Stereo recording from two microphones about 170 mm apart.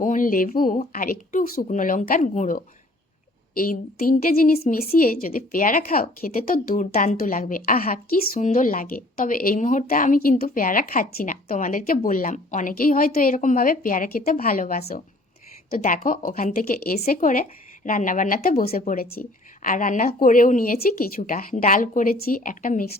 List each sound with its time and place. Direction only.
0.0 s speech: 50° left (ahead or behind)
3.6 s speech: 55° left (ahead or behind)